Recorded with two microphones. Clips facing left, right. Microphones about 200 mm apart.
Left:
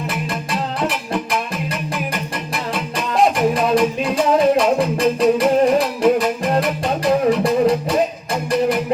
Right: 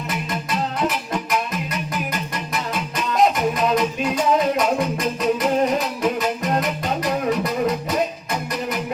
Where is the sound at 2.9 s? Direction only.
30° left (ahead or behind).